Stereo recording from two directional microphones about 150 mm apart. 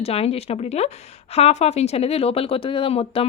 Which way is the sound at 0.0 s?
40° left (ahead or behind).